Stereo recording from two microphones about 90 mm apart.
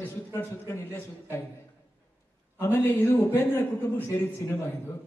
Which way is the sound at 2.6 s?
25° left (ahead or behind).